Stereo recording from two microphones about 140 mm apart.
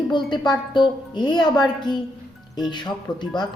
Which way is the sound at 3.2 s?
30° left (ahead or behind).